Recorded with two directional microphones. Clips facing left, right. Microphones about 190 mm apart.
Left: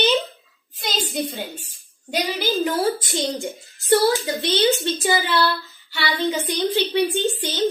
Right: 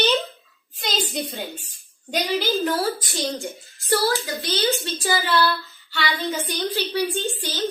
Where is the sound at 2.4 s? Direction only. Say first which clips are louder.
Left 2 dB; 15° left (ahead or behind).